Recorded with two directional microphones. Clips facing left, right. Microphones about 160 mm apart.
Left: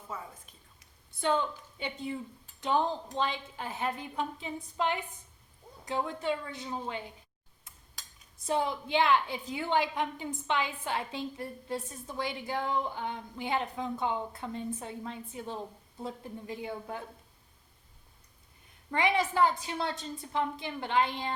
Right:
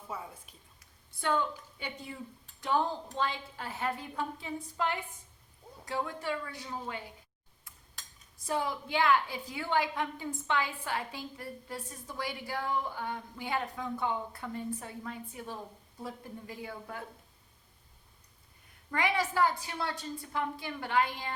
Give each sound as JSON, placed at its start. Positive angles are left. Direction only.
{"t": 0.1, "sound": "a woman's voice", "side_deg": -10}
{"t": 1.2, "sound": "a woman's voice", "side_deg": 20}
{"t": 8.4, "sound": "a woman's voice", "side_deg": 25}
{"t": 18.9, "sound": "a woman's voice", "side_deg": 25}